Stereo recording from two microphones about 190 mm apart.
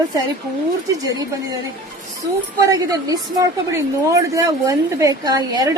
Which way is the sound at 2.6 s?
20° right (ahead or behind).